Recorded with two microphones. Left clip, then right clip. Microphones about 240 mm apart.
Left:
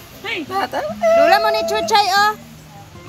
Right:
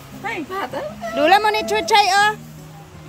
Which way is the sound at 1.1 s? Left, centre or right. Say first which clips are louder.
Left 1 dB; centre.